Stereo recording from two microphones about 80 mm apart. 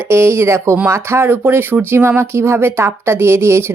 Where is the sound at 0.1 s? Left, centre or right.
Right.